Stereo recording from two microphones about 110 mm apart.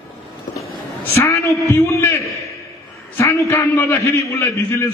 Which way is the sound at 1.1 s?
25° left (ahead or behind).